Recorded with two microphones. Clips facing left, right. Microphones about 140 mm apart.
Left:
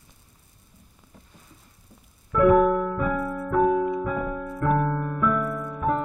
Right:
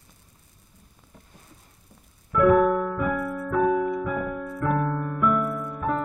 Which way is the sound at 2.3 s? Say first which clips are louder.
Left 1 dB; 25° left (ahead or behind).